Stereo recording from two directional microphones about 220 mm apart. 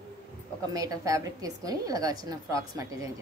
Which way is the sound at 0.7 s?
15° right (ahead or behind).